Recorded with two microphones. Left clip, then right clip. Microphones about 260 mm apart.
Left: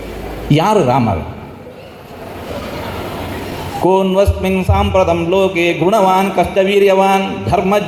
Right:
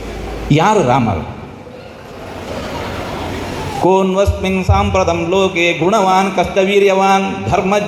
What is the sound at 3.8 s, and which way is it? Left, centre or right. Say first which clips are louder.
Mantra: left 1 dB; left.